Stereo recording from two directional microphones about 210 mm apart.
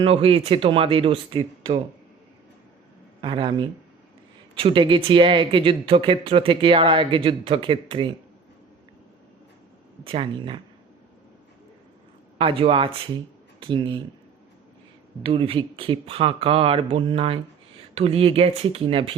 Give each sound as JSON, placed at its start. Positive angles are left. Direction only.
{"t": 0.0, "sound": "speech", "side_deg": -25}
{"t": 3.2, "sound": "speech", "side_deg": -20}
{"t": 10.0, "sound": "speech", "side_deg": -25}
{"t": 12.4, "sound": "speech", "side_deg": -25}
{"t": 15.2, "sound": "speech", "side_deg": -25}